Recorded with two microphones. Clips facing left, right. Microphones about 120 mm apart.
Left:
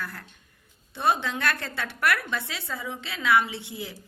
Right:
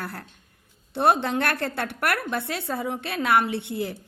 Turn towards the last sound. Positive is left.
turn(degrees=-65)  # may be behind; listen again after turning